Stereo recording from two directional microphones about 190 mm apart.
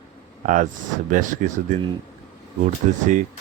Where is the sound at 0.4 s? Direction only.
40° right (ahead or behind).